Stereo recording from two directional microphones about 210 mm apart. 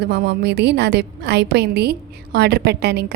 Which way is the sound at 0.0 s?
50° right (ahead or behind).